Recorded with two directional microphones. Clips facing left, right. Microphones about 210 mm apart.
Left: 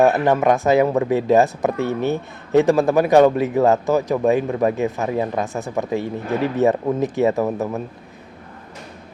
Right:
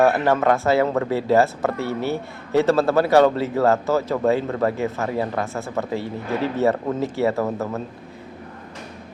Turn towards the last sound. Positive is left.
turn(degrees=15)  # may be behind; listen again after turning